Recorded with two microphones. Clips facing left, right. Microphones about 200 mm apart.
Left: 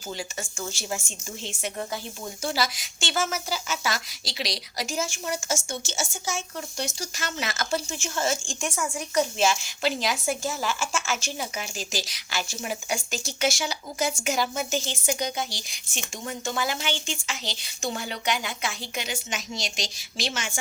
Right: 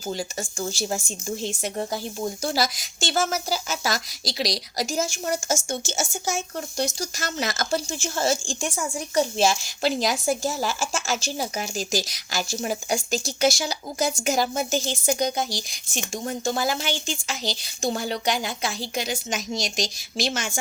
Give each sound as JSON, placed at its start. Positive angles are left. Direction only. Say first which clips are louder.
{"t": 0.1, "sound": "a woman's voice", "louder": "right 4 dB", "side_deg": -35}